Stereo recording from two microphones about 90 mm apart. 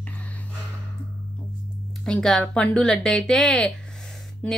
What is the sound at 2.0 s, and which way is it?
A woman's voice, 10° left (ahead or behind).